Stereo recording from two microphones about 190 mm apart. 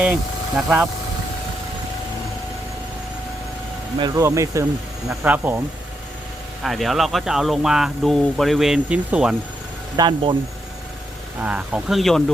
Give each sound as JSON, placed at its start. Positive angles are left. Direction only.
{"t": 0.0, "sound": "speech", "side_deg": -5}
{"t": 3.9, "sound": "speech", "side_deg": -20}
{"t": 10.0, "sound": "speech", "side_deg": -25}
{"t": 11.3, "sound": "speech", "side_deg": -10}